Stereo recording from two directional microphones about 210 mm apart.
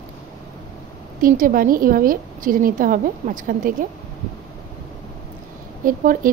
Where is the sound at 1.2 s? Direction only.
40° right (ahead or behind).